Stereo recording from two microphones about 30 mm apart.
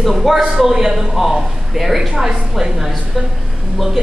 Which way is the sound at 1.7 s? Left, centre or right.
Centre.